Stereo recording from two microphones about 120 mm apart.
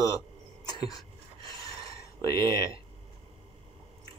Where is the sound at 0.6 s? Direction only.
35° left (ahead or behind).